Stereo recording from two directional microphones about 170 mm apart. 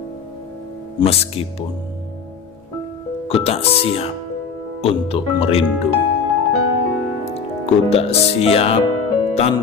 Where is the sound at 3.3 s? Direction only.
35° left (ahead or behind).